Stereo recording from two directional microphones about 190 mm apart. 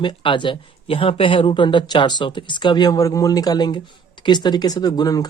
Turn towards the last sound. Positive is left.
turn(degrees=20)  # may be behind; listen again after turning